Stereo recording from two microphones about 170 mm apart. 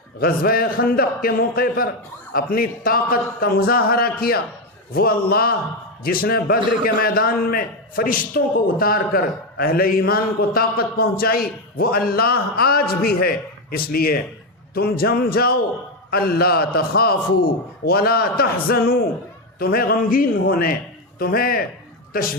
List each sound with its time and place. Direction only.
0.2 s a man's voice: 60° left (ahead or behind)